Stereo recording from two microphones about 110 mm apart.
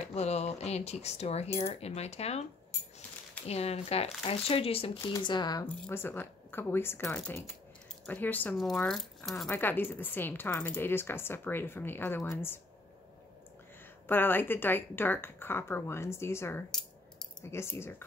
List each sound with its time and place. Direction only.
0.1 s speech: 80° left
3.4 s speech: 70° left (ahead or behind)
5.2 s speech: 40° left (ahead or behind)
5.9 s speech: 20° left (ahead or behind)
8.8 s speech: 5° left (ahead or behind)
9.5 s speech: 20° left (ahead or behind)
14.0 s speech: 20° left (ahead or behind)